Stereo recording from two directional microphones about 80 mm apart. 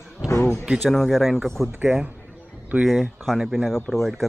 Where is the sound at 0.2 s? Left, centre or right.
Left.